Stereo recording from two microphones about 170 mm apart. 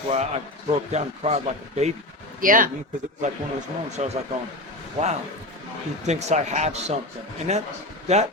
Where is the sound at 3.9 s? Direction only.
40° right (ahead or behind).